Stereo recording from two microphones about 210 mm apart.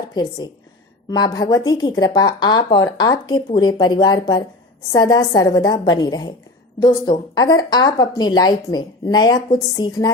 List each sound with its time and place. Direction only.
0.1 s a woman's voice: 20° left (ahead or behind)